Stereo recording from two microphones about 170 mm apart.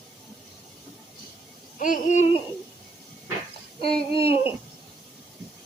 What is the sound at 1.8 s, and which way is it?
Babbling, 50° left (ahead or behind).